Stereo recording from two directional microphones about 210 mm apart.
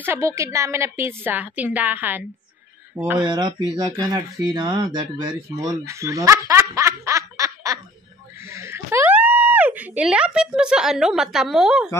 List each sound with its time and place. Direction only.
0.0 s speech: 10° right (ahead or behind)